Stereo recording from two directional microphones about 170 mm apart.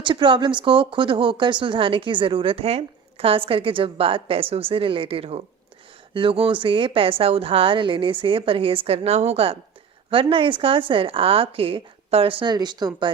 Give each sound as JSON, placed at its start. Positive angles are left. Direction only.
{"t": 0.0, "sound": "speech", "side_deg": -30}